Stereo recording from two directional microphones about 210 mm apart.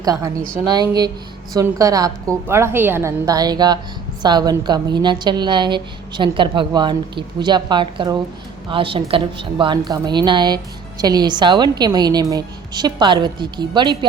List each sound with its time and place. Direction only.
0.0 s a woman's voice: 15° right (ahead or behind)